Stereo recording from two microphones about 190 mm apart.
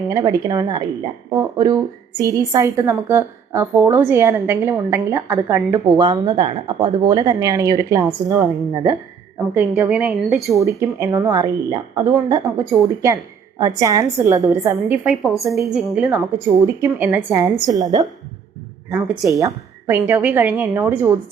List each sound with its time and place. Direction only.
0.1 s a woman's voice: 20° right (ahead or behind)
9.6 s a woman's voice: 10° right (ahead or behind)
10.6 s a woman's voice: 15° right (ahead or behind)